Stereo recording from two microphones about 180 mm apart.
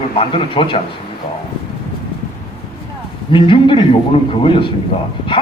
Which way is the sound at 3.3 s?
25° left (ahead or behind).